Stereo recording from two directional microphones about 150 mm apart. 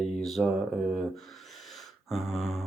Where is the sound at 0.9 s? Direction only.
Centre (ahead or behind).